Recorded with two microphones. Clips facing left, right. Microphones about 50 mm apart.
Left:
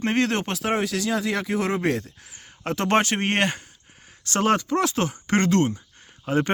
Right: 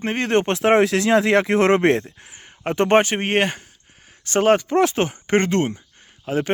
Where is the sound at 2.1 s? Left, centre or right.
Right.